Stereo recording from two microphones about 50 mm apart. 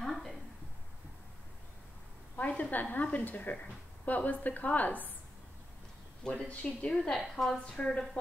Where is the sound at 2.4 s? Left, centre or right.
Left.